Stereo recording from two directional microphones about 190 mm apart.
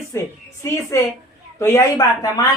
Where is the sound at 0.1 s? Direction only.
15° left (ahead or behind).